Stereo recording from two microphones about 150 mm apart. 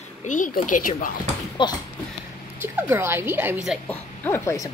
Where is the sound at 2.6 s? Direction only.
15° right (ahead or behind).